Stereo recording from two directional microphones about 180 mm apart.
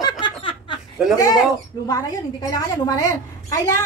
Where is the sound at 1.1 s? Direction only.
20° left (ahead or behind).